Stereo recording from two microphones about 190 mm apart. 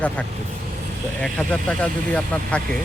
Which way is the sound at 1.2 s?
5° left (ahead or behind).